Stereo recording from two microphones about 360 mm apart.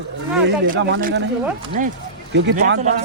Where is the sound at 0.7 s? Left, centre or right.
Right.